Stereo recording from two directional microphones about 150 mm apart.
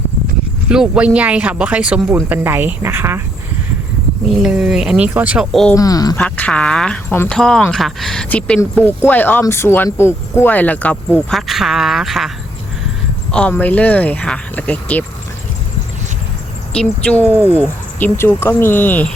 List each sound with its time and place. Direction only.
0.7 s speech: 5° right (ahead or behind)
4.3 s speech: 5° right (ahead or behind)
5.7 s speech: 25° left (ahead or behind)
6.1 s speech: 10° left (ahead or behind)
13.3 s speech: 10° left (ahead or behind)
16.7 s speech: 10° left (ahead or behind)